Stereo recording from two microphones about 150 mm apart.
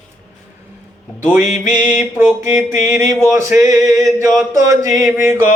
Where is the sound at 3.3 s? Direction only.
20° right (ahead or behind).